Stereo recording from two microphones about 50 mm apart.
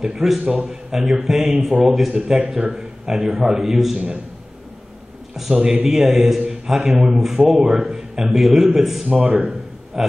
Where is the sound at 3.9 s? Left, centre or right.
Right.